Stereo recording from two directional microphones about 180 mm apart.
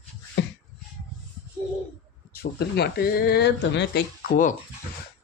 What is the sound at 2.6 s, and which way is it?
Speech, 60° left (ahead or behind).